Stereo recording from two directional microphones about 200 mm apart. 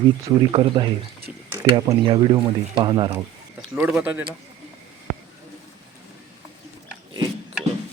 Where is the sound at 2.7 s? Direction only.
20° right (ahead or behind).